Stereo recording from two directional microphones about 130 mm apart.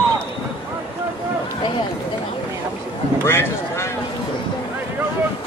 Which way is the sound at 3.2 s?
20° left (ahead or behind).